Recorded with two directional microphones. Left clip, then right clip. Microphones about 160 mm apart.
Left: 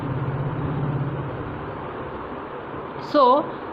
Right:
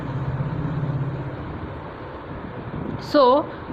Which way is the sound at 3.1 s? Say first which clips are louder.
Right 1 dB; 35° right (ahead or behind).